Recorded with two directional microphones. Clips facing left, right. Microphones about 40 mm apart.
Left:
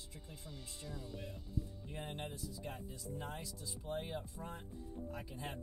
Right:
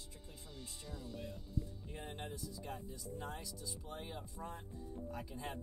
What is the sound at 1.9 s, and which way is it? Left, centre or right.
Speech, left.